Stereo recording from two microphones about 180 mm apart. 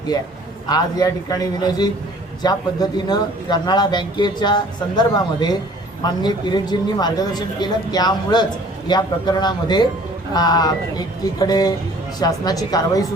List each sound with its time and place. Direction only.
0.7 s a man's voice: 20° left (ahead or behind)